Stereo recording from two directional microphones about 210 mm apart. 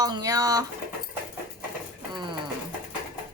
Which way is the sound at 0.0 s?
20° right (ahead or behind).